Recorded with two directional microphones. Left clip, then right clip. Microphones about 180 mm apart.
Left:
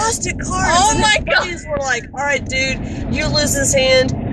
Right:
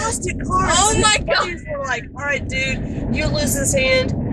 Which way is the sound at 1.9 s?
25° left (ahead or behind).